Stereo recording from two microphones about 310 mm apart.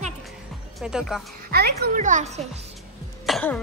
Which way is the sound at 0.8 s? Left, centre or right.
Centre.